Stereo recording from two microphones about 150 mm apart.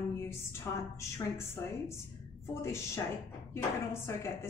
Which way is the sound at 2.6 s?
20° left (ahead or behind).